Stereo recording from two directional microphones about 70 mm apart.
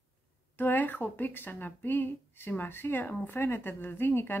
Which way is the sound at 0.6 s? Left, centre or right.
Left.